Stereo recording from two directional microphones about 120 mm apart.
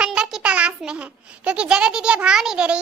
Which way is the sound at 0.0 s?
5° right (ahead or behind).